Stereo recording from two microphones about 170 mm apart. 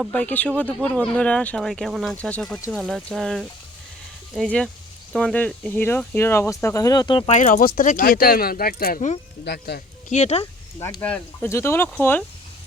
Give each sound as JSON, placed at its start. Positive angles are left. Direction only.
{"t": 0.0, "sound": "speech", "side_deg": 5}
{"t": 7.3, "sound": "speech", "side_deg": 45}
{"t": 9.4, "sound": "speech", "side_deg": 70}
{"t": 10.1, "sound": "speech", "side_deg": 40}
{"t": 10.8, "sound": "speech", "side_deg": 15}
{"t": 11.0, "sound": "speech", "side_deg": 5}